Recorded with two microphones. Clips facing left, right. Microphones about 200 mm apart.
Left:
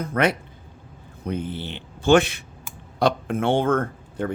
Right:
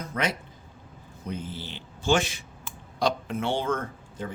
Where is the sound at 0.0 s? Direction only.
60° left (ahead or behind).